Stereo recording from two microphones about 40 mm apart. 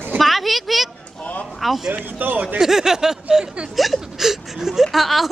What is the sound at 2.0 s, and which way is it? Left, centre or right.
Speech, right.